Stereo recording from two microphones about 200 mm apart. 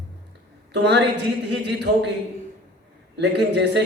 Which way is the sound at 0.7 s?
60° right (ahead or behind).